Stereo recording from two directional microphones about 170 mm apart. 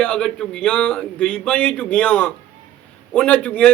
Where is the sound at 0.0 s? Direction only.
5° left (ahead or behind).